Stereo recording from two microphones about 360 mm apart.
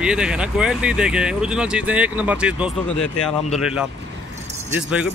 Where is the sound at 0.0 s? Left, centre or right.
Centre.